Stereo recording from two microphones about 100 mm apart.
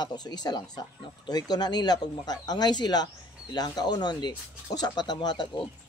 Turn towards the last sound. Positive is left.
turn(degrees=45)  # may be behind; listen again after turning